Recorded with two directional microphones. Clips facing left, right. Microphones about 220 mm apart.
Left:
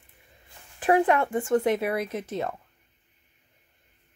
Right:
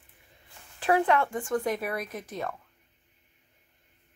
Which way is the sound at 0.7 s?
20° left (ahead or behind).